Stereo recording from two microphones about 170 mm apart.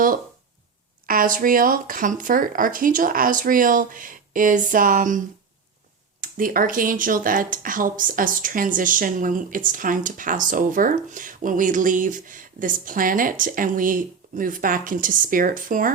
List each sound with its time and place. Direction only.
1.0 s speech: 55° right (ahead or behind)